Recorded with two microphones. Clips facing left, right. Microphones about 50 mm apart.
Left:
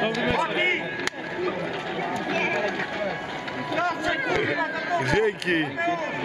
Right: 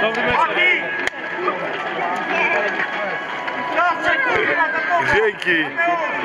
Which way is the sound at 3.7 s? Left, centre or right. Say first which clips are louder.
Right 8 dB; right.